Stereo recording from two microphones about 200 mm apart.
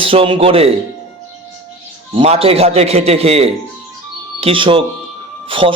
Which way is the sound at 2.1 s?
30° right (ahead or behind).